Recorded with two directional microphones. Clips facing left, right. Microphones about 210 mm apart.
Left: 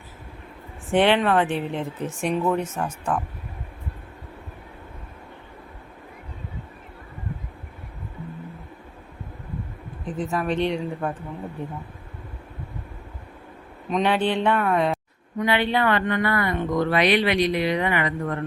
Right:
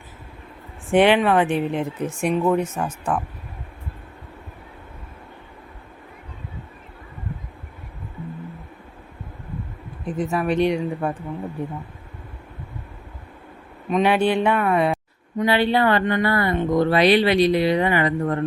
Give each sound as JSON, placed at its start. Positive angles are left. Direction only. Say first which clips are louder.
{"t": 0.9, "sound": "speech", "louder": "right 3 dB", "side_deg": -10}
{"t": 10.1, "sound": "speech", "louder": "right 3 dB", "side_deg": -10}
{"t": 13.9, "sound": "speech", "louder": "right 3 dB", "side_deg": -10}
{"t": 15.4, "sound": "speech", "louder": "right 3 dB", "side_deg": -35}